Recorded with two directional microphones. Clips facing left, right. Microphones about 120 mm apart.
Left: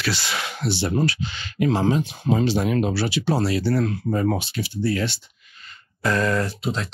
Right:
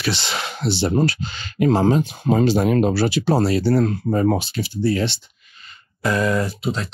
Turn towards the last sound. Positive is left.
turn(degrees=-5)  # may be behind; listen again after turning